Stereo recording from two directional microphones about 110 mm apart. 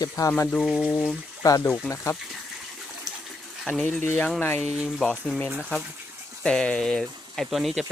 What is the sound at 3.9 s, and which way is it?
Speech, 15° left (ahead or behind).